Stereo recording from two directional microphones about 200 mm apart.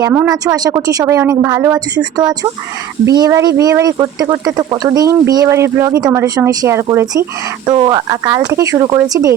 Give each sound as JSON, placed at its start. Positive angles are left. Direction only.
{"t": 0.0, "sound": "speech", "side_deg": -5}
{"t": 0.3, "sound": "speech", "side_deg": -20}